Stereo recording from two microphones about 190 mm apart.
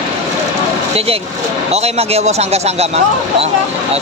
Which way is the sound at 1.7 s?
35° right (ahead or behind).